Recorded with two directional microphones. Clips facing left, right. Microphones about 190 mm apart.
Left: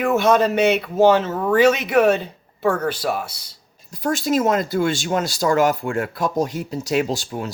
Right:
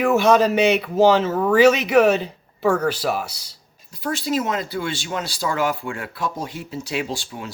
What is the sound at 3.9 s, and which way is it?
Speech, 45° left (ahead or behind).